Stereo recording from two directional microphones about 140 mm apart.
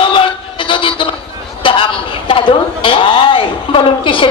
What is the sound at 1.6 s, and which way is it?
A woman's voice, 40° left (ahead or behind).